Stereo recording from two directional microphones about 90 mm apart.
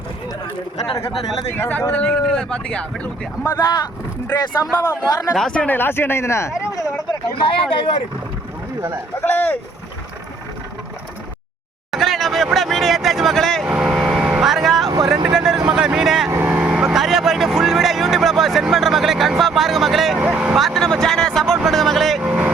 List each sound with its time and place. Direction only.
1.5 s speech: 25° left (ahead or behind)
3.4 s speech: 45° left (ahead or behind)
5.5 s speech: 15° left (ahead or behind)
7.1 s speech: 70° left (ahead or behind)
9.2 s speech: 20° left (ahead or behind)
11.9 s a sound: centre (ahead or behind)
13.7 s vehicle: 10° right (ahead or behind)
16.3 s vehicle: 20° right (ahead or behind)
20.6 s speech: centre (ahead or behind)
22.2 s speech: 15° right (ahead or behind)